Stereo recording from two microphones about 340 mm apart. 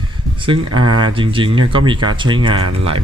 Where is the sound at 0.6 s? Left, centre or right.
Right.